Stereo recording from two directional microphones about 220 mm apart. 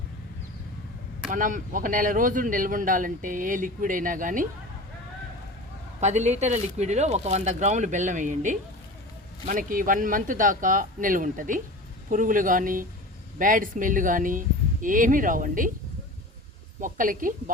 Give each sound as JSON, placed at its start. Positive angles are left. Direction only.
{"t": 1.3, "sound": "speech", "side_deg": -35}
{"t": 6.0, "sound": "speech", "side_deg": -30}
{"t": 16.8, "sound": "speech", "side_deg": -35}